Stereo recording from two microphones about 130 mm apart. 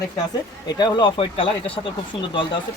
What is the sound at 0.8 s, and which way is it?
Speech, 35° left (ahead or behind).